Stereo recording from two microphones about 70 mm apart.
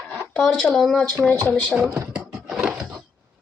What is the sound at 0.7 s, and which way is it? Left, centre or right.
Speech, centre.